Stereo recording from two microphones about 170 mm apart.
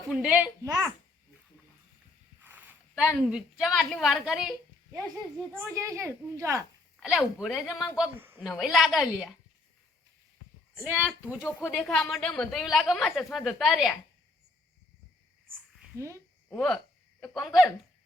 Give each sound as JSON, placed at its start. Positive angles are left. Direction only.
{"t": 0.1, "sound": "a child's voice", "side_deg": -5}
{"t": 0.6, "sound": "a child's voice", "side_deg": -20}
{"t": 2.4, "sound": "a sound", "side_deg": -10}
{"t": 3.2, "sound": "a woman's voice", "side_deg": -5}
{"t": 5.6, "sound": "a child's voice", "side_deg": -20}
{"t": 7.0, "sound": "a woman's voice", "side_deg": -5}
{"t": 10.8, "sound": "a child's voice", "side_deg": -10}
{"t": 16.0, "sound": "a child's voice", "side_deg": -15}
{"t": 16.5, "sound": "speech", "side_deg": 5}